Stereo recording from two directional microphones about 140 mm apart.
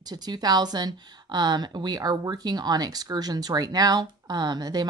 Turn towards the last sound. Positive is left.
turn(degrees=-30)  # may be behind; listen again after turning